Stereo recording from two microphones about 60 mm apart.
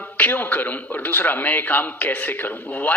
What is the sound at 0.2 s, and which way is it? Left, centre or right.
A man's voice, left.